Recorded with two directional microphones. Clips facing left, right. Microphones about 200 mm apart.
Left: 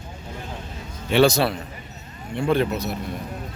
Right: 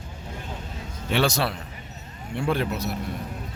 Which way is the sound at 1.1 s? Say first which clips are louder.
Left 6 dB; centre (ahead or behind).